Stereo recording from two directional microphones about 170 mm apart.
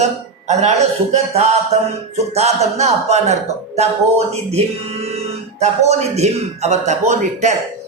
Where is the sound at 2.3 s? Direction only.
40° right (ahead or behind).